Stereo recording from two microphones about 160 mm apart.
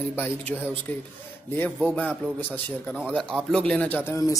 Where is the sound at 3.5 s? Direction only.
5° left (ahead or behind).